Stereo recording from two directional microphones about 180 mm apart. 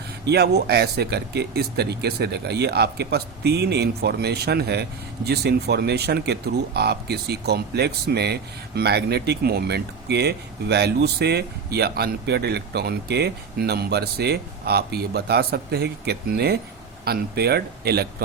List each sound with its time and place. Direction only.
0.3 s speech: 65° right (ahead or behind)